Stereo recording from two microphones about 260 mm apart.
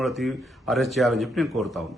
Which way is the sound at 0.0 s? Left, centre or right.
Centre.